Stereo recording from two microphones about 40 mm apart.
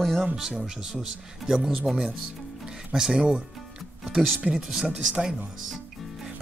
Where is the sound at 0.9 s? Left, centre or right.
Centre.